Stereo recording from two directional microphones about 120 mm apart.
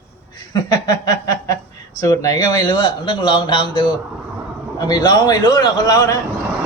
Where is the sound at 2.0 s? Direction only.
30° left (ahead or behind).